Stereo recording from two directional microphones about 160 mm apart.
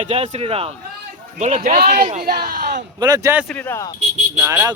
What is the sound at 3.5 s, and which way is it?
Speech, 15° left (ahead or behind).